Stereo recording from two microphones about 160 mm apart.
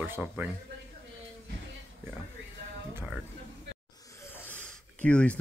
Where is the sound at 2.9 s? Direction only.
5° right (ahead or behind).